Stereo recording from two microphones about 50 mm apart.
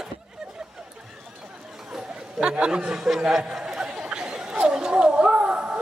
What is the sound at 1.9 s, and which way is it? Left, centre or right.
Chatter, centre.